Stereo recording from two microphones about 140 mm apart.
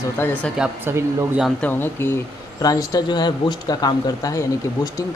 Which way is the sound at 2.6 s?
25° left (ahead or behind).